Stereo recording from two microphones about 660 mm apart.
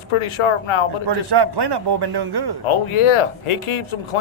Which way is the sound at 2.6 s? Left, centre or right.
Left.